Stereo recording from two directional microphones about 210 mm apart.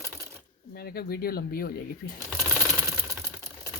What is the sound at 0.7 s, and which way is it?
Speech, 45° left (ahead or behind).